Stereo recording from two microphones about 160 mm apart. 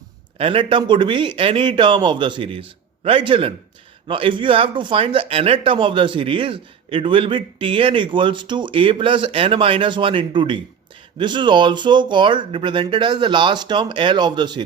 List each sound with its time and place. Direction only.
0.3 s speech: 35° right (ahead or behind)